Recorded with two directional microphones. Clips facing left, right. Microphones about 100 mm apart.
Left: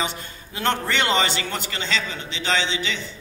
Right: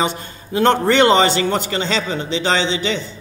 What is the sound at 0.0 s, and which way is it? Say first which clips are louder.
Speech: right 7 dB; 30° right (ahead or behind).